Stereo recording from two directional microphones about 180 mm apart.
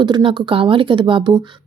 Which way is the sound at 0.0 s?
25° right (ahead or behind).